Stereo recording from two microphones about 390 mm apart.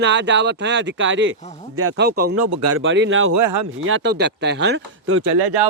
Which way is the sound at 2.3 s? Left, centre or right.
Right.